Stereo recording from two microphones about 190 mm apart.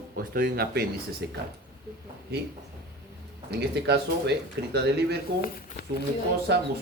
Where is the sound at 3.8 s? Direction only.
60° right (ahead or behind).